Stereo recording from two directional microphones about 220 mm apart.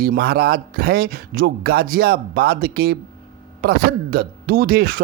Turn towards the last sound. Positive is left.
turn(degrees=-40)  # may be behind; listen again after turning